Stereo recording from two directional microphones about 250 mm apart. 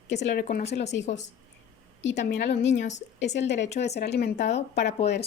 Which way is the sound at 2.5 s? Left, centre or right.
Left.